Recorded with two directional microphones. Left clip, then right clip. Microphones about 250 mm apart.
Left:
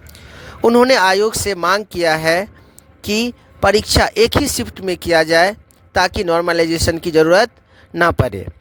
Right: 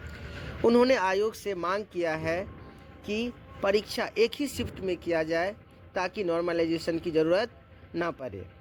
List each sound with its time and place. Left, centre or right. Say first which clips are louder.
0.6 s speech: left 12 dB; left